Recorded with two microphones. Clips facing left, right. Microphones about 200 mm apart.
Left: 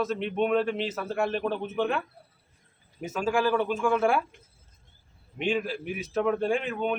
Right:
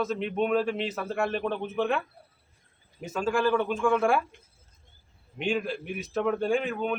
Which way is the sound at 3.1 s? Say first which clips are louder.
Even; 5° left (ahead or behind).